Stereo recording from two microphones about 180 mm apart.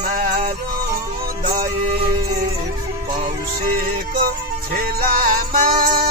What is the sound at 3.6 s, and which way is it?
Music, 50° right (ahead or behind).